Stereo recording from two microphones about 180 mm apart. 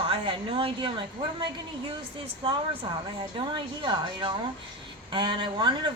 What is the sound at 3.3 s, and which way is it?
A woman's voice, 25° right (ahead or behind).